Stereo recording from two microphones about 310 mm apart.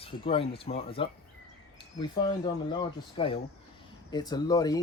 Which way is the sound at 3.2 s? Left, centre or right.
Centre.